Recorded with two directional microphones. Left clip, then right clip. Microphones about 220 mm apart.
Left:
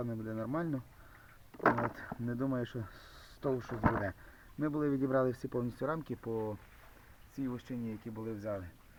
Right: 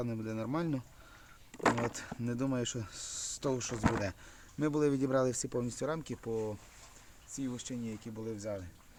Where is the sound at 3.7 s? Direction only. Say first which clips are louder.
Even; 15° right (ahead or behind).